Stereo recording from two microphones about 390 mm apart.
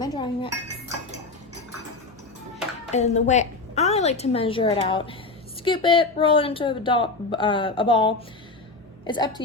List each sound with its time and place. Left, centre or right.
0.0 s cutlery: centre
2.9 s a woman's voice: centre